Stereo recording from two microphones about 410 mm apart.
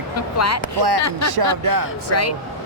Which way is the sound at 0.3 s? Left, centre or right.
Left.